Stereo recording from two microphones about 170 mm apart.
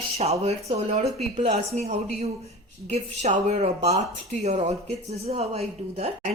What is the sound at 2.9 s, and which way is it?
Speech, 40° right (ahead or behind).